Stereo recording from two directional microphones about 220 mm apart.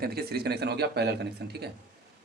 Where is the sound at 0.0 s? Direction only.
45° right (ahead or behind).